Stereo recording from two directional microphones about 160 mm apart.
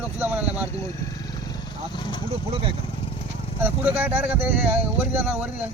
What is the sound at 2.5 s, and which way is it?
Speech, 35° right (ahead or behind).